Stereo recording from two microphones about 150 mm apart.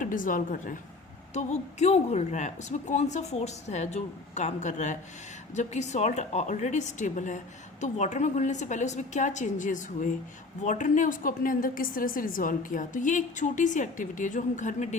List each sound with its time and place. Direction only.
0.0 s a woman's voice: 60° left (ahead or behind)
1.3 s a woman's voice: 50° left (ahead or behind)